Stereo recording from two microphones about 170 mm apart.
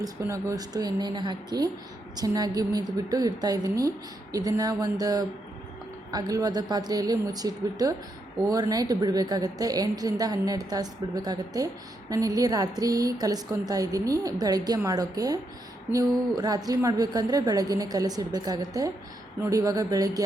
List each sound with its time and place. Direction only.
0.0 s a woman's voice: 20° right (ahead or behind)